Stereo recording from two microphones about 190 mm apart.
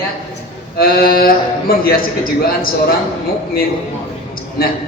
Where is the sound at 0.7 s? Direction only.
50° left (ahead or behind).